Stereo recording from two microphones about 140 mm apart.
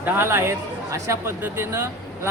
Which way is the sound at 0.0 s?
15° right (ahead or behind).